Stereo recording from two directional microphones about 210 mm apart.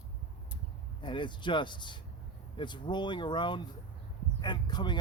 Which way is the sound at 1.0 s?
20° left (ahead or behind).